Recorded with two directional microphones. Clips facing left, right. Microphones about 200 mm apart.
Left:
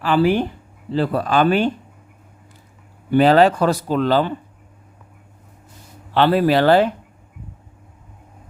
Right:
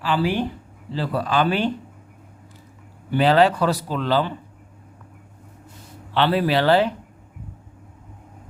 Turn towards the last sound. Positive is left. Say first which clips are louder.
# left 4 dB
turn(degrees=50)  # may be behind; listen again after turning